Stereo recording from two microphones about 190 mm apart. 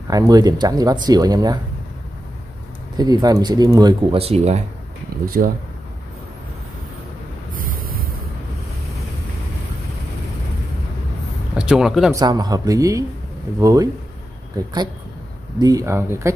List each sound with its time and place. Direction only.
0.1 s speech: 20° right (ahead or behind)
3.0 s speech: 20° right (ahead or behind)
5.2 s speech: 50° right (ahead or behind)
11.5 s speech: 5° right (ahead or behind)
12.1 s speech: 20° right (ahead or behind)
15.6 s speech: 15° right (ahead or behind)